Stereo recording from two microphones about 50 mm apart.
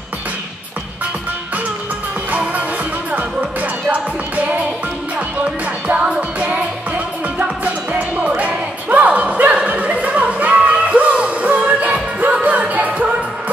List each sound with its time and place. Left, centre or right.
3.1 s music: right
7.3 s music: right